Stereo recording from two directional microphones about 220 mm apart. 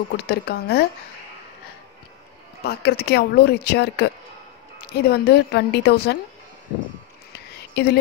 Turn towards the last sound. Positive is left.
turn(degrees=50)  # may be behind; listen again after turning